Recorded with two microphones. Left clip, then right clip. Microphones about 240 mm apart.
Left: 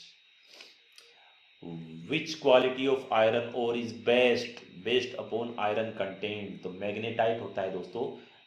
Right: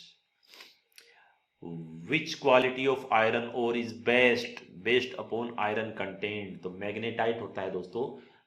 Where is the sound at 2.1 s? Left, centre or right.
Right.